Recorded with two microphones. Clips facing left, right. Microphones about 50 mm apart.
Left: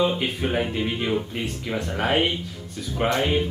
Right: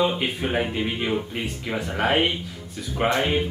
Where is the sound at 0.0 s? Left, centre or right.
Centre.